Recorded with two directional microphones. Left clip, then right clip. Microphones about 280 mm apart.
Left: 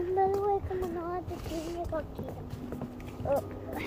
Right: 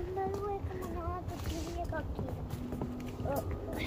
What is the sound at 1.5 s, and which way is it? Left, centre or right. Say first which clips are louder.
Speech: left 6 dB; centre.